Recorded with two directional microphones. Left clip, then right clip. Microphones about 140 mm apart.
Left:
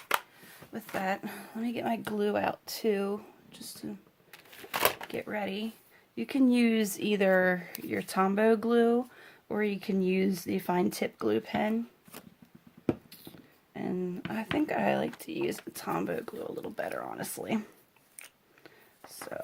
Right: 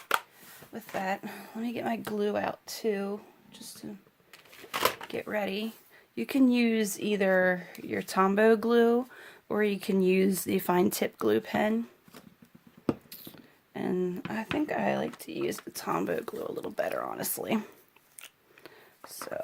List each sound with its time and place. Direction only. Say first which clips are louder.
0.7 s speech: even; 5° left (ahead or behind)
1.5 s speech: even; 15° right (ahead or behind); by 3.9 s 10° left (ahead or behind)
4.3 s a sound: left 1 dB; 30° left (ahead or behind)
5.0 s speech: right 3 dB; 15° right (ahead or behind)
6.5 s speech: even; 5° right (ahead or behind)
7.8 s speech: right 2 dB; 15° right (ahead or behind); by 11.8 s 35° right (ahead or behind)
12.8 s a sound: even; 25° right (ahead or behind)
14.6 s speech: left 1 dB; 5° right (ahead or behind)
15.7 s speech: right 2 dB; 20° right (ahead or behind)
18.6 s a sound: right 3 dB; 20° right (ahead or behind)